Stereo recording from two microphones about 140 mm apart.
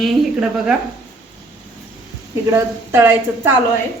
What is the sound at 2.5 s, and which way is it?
A woman's voice, 20° right (ahead or behind).